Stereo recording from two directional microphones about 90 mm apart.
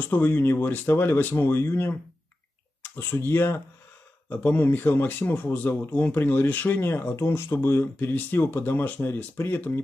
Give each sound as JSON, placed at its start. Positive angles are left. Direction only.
{"t": 0.1, "sound": "speech", "side_deg": 20}
{"t": 4.3, "sound": "speech", "side_deg": 15}